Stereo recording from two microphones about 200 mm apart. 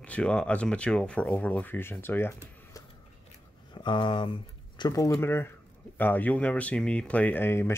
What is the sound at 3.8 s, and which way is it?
Speech, 25° left (ahead or behind).